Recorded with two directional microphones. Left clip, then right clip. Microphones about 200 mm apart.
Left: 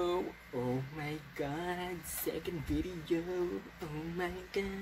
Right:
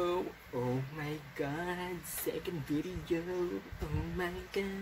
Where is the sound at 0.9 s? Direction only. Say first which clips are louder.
Right 1 dB; centre (ahead or behind).